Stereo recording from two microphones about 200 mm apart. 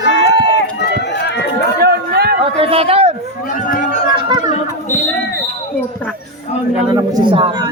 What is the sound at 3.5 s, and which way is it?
Chatter, 40° left (ahead or behind).